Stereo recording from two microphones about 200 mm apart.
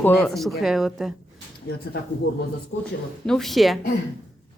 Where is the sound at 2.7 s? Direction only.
65° left (ahead or behind).